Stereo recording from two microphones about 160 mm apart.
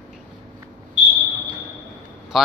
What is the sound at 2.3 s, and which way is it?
Speech, centre (ahead or behind).